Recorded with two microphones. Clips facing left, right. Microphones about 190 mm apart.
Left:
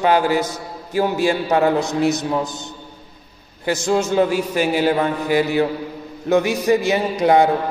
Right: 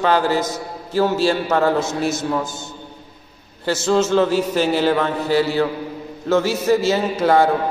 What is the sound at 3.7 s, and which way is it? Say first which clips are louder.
A man's voice: right 1 dB; 15° left (ahead or behind).